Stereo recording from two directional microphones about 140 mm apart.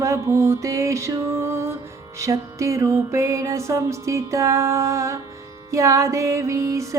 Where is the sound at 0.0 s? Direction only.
20° right (ahead or behind).